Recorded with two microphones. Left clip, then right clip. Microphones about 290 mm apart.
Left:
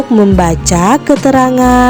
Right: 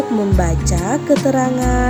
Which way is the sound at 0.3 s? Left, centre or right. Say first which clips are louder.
Left 9 dB; left.